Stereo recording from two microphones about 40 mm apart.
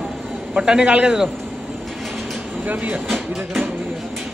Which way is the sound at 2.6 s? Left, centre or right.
Right.